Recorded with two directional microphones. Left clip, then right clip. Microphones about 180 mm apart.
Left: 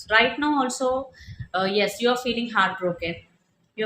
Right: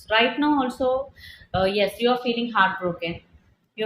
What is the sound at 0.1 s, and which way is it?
A woman's voice, 15° left (ahead or behind).